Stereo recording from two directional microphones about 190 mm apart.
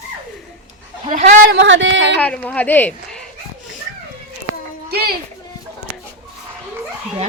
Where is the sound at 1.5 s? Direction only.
75° right (ahead or behind).